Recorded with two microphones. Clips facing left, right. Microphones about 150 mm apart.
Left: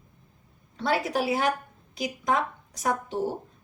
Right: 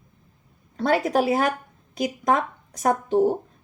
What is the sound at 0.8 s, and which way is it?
Speech, 45° right (ahead or behind).